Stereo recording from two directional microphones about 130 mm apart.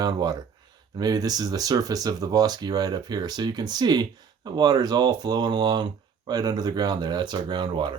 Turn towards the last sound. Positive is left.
turn(degrees=-40)  # may be behind; listen again after turning